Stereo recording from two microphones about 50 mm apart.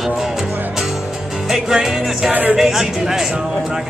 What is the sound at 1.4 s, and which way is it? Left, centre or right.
Music, centre.